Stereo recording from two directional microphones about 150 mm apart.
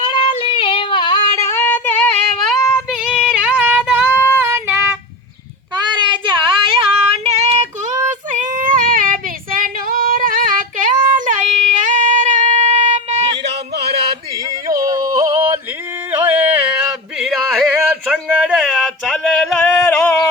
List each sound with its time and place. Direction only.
0.1 s yodeling: 35° left (ahead or behind)
1.4 s female singing: 15° left (ahead or behind); by 4.6 s 15° right (ahead or behind)
5.7 s child singing: 30° right (ahead or behind); by 7.9 s 45° right (ahead or behind)
8.3 s child singing: 60° right (ahead or behind)
14.7 s yodeling: 25° right (ahead or behind)
16.1 s carnatic music: 10° right (ahead or behind)
17.2 s a sound: 5° right (ahead or behind)
18.0 s male singing: 5° right (ahead or behind)